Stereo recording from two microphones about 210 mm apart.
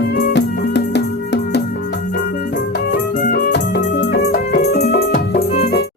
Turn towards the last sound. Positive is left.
turn(degrees=50)  # may be behind; listen again after turning